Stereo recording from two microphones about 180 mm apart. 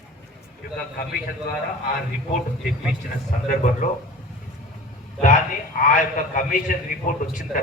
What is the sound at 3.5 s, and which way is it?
Speech, 45° left (ahead or behind).